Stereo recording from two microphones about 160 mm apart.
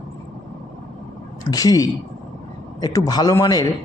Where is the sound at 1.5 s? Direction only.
20° left (ahead or behind).